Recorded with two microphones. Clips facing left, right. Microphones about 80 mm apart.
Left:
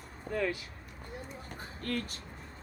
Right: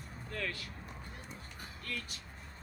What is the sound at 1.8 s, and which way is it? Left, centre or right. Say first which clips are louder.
Speech: left 8 dB; left.